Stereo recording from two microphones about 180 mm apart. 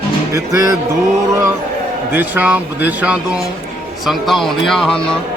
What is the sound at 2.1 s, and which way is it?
Speech, 10° right (ahead or behind).